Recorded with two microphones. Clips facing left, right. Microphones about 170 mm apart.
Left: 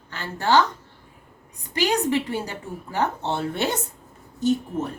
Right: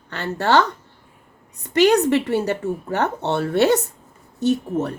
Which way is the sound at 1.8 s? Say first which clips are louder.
Right 6 dB; 65° right (ahead or behind).